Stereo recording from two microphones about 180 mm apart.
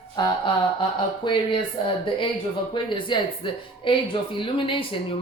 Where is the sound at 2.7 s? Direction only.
30° left (ahead or behind).